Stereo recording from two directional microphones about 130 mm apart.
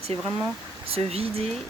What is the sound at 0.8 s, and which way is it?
Speech, 50° right (ahead or behind).